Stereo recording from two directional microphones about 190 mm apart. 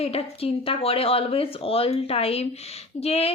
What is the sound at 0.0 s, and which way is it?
A woman's voice, 30° left (ahead or behind).